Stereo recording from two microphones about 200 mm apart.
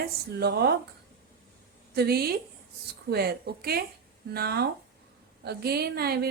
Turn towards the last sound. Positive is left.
turn(degrees=-50)  # may be behind; listen again after turning